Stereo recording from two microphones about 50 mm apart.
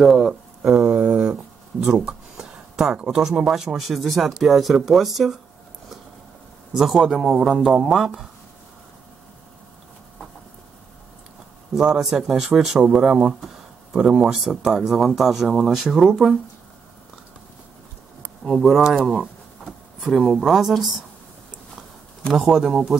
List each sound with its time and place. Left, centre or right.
0.0 s speech: centre
0.6 s a sound: right; by 4.0 s centre
4.0 s speech: centre
6.8 s speech: centre
11.7 s speech: centre
18.4 s speech: centre
22.5 s speech: centre